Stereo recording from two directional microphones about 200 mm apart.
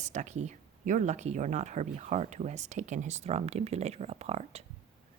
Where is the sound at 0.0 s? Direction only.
35° right (ahead or behind).